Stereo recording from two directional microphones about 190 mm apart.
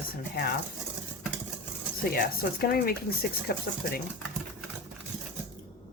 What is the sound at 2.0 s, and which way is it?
A woman's voice, 50° left (ahead or behind).